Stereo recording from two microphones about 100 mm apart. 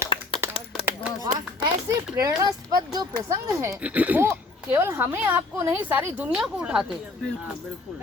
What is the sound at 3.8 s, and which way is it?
Speech, 15° right (ahead or behind).